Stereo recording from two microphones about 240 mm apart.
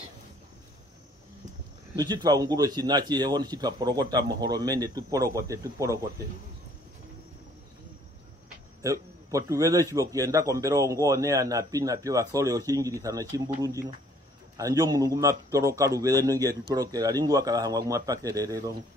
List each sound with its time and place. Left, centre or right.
2.0 s speech: centre
8.8 s a man's voice: centre